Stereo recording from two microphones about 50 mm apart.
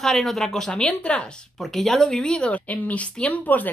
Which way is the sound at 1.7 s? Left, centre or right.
Centre.